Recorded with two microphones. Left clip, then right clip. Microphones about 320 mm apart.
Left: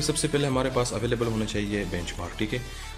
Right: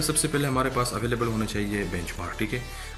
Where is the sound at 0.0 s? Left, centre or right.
Left.